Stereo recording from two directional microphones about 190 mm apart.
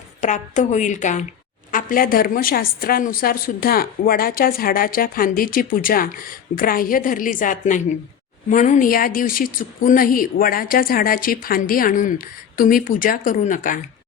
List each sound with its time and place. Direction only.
0.2 s a woman's voice: 40° left (ahead or behind)